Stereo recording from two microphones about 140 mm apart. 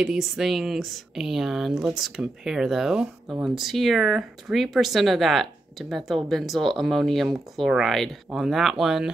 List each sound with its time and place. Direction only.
0.0 s speech: 5° right (ahead or behind)